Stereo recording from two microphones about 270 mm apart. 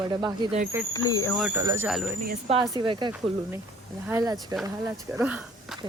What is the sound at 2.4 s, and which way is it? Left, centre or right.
Speech, centre.